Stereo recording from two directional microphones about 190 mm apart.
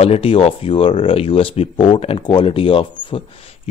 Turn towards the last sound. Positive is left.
turn(degrees=30)  # may be behind; listen again after turning